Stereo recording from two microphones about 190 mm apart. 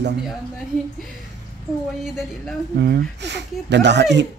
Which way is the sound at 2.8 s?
60° right (ahead or behind).